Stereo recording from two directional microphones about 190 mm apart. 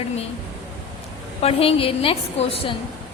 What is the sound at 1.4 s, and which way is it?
A woman's voice, 30° left (ahead or behind).